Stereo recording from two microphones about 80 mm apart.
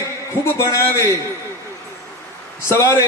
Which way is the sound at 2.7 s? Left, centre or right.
Left.